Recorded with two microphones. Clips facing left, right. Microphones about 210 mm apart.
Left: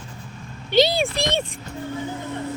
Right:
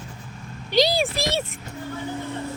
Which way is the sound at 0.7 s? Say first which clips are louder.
Left 2 dB; centre (ahead or behind).